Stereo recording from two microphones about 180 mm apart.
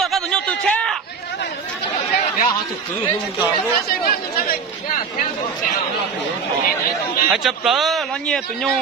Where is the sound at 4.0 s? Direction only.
55° left (ahead or behind).